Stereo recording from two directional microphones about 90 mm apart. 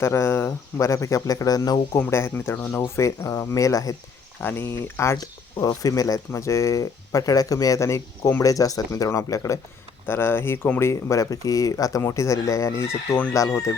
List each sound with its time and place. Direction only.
0.0 s speech: 30° left (ahead or behind); by 1.8 s 45° left (ahead or behind)
1.9 s speech: 30° left (ahead or behind)
4.4 s speech: 25° left (ahead or behind)
5.1 s speech: 45° left (ahead or behind)
10.1 s speech: 25° left (ahead or behind)